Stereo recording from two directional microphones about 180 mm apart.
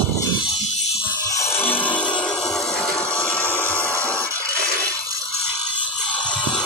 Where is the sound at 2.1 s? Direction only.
5° left (ahead or behind).